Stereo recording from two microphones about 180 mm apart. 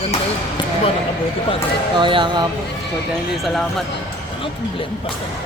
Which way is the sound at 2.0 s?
25° right (ahead or behind).